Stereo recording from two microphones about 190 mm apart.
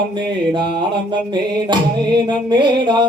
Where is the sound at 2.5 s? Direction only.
25° right (ahead or behind).